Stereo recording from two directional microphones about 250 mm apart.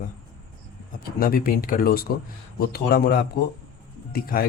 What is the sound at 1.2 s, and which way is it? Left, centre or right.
Speech, left.